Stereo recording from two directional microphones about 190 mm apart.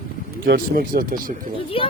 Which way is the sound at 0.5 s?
50° right (ahead or behind).